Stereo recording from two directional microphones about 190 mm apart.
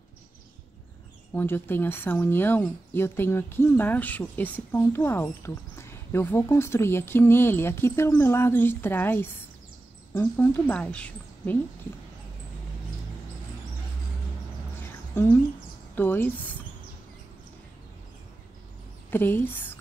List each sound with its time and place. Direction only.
1.3 s speech: 10° left (ahead or behind)
14.8 s a sound: 10° left (ahead or behind)
15.9 s speech: 10° left (ahead or behind)
19.0 s speech: 10° left (ahead or behind)